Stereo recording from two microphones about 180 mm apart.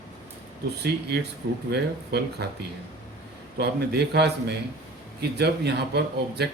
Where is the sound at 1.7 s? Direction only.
65° right (ahead or behind).